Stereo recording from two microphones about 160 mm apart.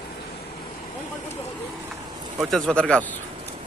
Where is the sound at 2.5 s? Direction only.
5° left (ahead or behind).